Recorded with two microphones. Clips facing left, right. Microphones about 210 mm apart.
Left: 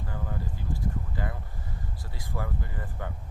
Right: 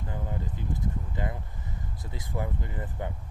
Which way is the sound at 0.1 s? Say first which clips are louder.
Right 1 dB; 20° right (ahead or behind).